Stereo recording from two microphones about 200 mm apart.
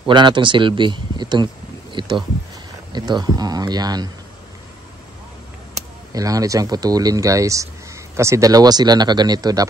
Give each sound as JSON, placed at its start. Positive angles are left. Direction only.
{"t": 0.0, "sound": "speech", "side_deg": -25}
{"t": 5.8, "sound": "speech", "side_deg": -15}